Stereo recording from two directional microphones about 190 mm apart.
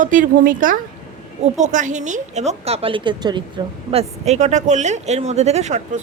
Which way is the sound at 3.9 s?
35° right (ahead or behind).